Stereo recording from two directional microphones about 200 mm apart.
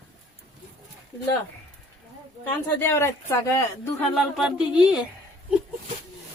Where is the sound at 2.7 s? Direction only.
10° left (ahead or behind).